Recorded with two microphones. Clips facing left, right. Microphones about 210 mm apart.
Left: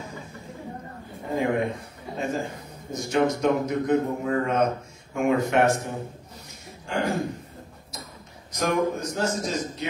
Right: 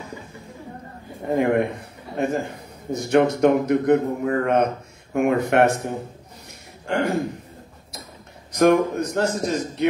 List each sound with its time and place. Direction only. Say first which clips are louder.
1.3 s a man's voice: right 5 dB; 60° right (ahead or behind)
8.5 s a man's voice: right 7 dB; 60° right (ahead or behind)